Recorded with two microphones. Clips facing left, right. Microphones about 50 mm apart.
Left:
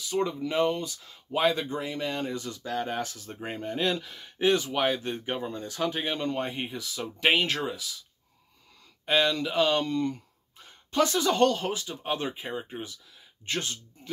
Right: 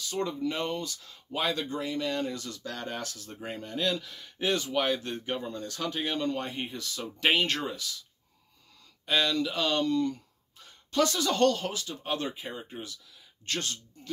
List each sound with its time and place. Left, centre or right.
0.0 s speech: centre
9.0 s speech: left